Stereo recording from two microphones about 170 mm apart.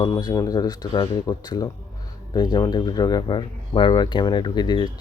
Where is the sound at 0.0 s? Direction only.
20° left (ahead or behind).